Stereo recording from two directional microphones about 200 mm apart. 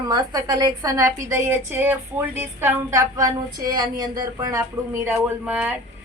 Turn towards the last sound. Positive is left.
turn(degrees=-10)  # may be behind; listen again after turning